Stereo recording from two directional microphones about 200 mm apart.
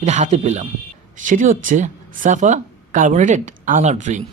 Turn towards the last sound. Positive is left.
turn(degrees=-35)  # may be behind; listen again after turning